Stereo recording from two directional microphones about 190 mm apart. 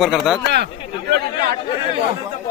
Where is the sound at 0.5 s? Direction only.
60° right (ahead or behind).